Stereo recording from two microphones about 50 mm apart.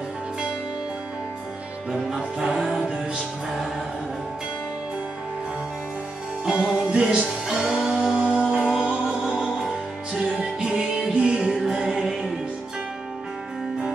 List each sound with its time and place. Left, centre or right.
1.9 s music: centre
6.4 s music: centre